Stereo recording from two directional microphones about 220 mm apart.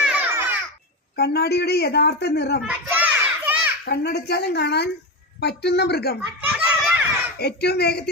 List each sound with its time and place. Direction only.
0.0 s babbling: 5° right (ahead or behind)
1.1 s speech: 45° left (ahead or behind)
2.6 s children playing: 10° right (ahead or behind)
3.8 s speech: 45° left (ahead or behind)
6.5 s children playing: 5° right (ahead or behind)
7.3 s speech: 45° left (ahead or behind)